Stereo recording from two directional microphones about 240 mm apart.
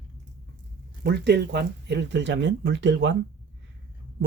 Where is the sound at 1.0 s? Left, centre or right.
Right.